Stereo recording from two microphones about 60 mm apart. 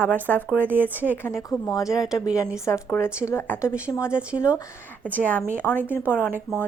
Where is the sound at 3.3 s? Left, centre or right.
Left.